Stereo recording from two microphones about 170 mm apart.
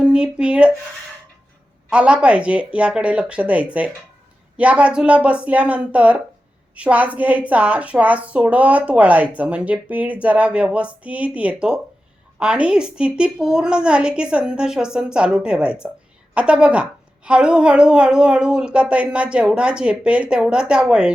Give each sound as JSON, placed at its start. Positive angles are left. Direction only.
{"t": 0.0, "sound": "speech", "side_deg": -5}
{"t": 1.9, "sound": "a woman's voice", "side_deg": -5}